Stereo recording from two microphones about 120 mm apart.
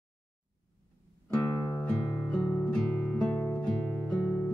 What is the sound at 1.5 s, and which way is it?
Music, 30° left (ahead or behind).